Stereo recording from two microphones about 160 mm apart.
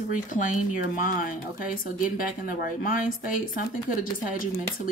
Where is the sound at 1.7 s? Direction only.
60° left (ahead or behind).